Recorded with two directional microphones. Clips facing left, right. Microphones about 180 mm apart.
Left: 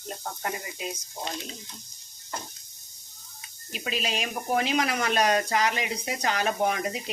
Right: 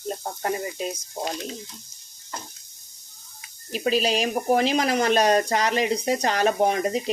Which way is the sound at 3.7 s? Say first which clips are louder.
Right 9 dB; 35° right (ahead or behind).